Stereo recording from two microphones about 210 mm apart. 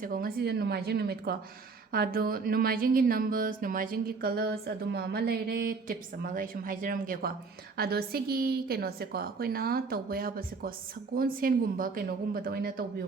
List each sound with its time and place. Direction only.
0.0 s speech: 45° right (ahead or behind)